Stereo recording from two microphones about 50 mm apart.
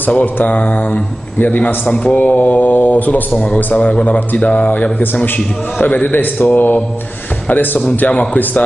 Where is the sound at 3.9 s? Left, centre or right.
Left.